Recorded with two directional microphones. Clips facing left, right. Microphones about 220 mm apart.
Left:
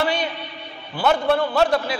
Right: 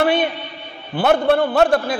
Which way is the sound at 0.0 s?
55° right (ahead or behind).